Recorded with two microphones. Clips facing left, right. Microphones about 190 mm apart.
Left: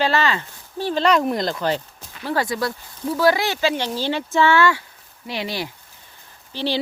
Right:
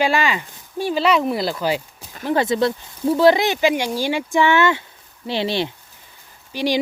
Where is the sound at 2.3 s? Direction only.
25° right (ahead or behind).